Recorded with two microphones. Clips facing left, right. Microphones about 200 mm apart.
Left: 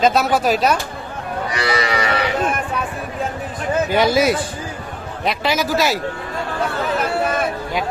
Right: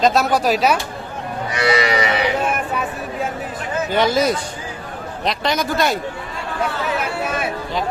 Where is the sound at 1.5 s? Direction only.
20° right (ahead or behind).